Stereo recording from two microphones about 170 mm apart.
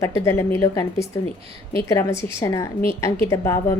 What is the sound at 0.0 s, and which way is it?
A woman's voice, 15° left (ahead or behind).